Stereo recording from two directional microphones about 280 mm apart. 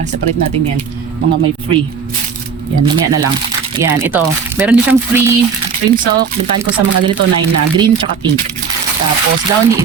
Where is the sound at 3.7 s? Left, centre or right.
Centre.